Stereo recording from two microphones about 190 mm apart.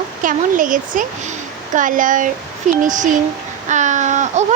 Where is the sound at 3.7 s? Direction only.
40° right (ahead or behind).